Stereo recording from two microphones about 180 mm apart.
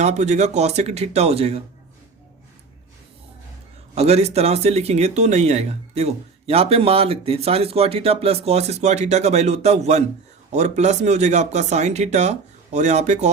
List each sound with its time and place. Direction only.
0.0 s speech: 40° right (ahead or behind)
3.9 s speech: 35° right (ahead or behind)